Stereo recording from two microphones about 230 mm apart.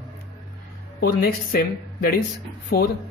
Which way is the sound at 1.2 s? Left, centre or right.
Left.